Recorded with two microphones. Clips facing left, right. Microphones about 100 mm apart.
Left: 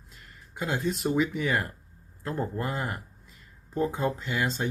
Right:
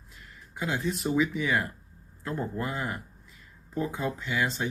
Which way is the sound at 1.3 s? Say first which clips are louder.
Even; 50° left (ahead or behind).